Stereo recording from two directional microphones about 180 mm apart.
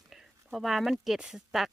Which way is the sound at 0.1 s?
Centre (ahead or behind).